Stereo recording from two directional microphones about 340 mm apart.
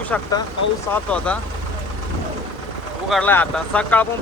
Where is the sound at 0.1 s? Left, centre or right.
Centre.